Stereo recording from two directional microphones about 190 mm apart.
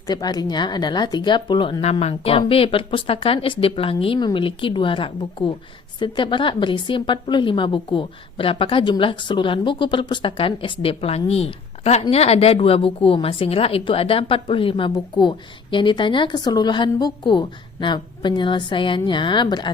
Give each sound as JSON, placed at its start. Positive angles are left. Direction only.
{"t": 0.1, "sound": "a woman's voice", "side_deg": 20}